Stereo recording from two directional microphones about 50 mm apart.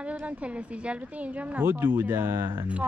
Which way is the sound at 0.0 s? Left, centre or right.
Right.